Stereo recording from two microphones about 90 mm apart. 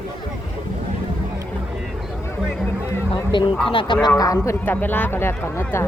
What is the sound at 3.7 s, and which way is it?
Speech, 70° left (ahead or behind).